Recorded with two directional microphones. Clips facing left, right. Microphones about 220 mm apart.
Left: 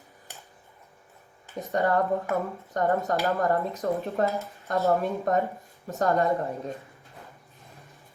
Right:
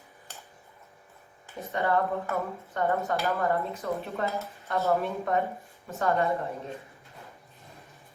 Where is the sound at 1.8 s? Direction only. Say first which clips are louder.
Left 3 dB; 40° left (ahead or behind).